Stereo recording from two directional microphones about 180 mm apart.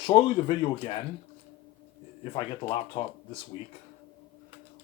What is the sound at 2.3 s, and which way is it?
Speech, 30° left (ahead or behind).